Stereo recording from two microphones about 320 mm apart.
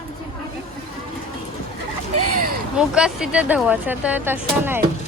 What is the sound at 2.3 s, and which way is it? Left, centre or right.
Speech, right.